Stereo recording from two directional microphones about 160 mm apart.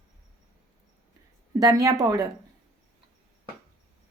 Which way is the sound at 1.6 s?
20° right (ahead or behind).